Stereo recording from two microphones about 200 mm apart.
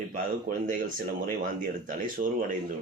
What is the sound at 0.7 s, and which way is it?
Speech, 40° right (ahead or behind).